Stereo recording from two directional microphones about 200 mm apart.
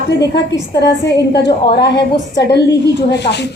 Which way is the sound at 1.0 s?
60° left (ahead or behind).